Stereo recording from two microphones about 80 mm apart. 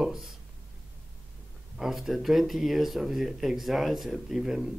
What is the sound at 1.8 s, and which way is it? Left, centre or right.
A man's voice, centre.